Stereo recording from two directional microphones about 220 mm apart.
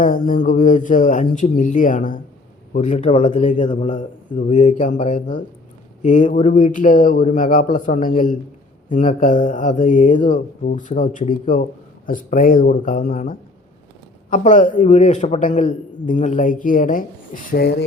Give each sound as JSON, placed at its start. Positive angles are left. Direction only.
{"t": 0.0, "sound": "a man's voice", "side_deg": 40}